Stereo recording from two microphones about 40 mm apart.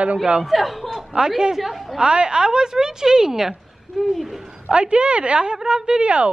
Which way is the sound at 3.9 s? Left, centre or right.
Centre.